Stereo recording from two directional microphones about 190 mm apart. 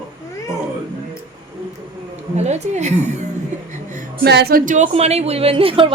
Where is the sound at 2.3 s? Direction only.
35° right (ahead or behind).